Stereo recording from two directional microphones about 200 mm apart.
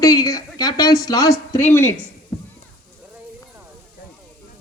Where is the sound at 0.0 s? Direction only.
15° left (ahead or behind).